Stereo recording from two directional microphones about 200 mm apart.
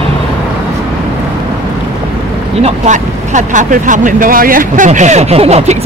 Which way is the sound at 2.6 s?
35° right (ahead or behind).